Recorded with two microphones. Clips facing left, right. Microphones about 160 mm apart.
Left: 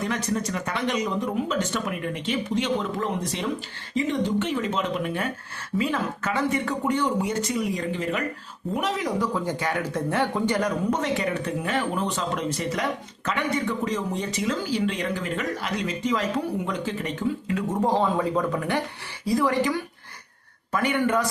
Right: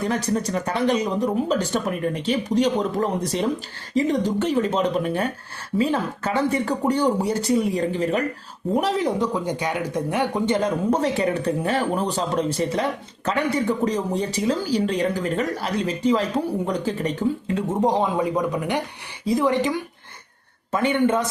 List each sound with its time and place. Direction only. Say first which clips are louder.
0.0 s speech: right 4 dB; 35° right (ahead or behind)
17.7 s a woman's voice: right 2 dB; 15° right (ahead or behind)